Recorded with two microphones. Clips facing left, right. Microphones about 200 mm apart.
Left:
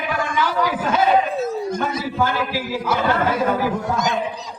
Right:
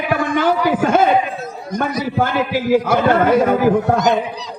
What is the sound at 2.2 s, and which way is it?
A man's voice, 55° right (ahead or behind).